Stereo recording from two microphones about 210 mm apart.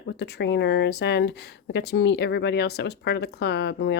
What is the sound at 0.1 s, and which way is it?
Speech, 50° left (ahead or behind).